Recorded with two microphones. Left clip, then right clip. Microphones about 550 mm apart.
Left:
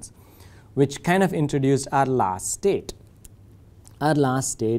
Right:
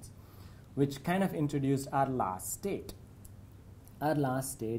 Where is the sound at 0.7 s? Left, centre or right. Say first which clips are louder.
Left 11 dB; left.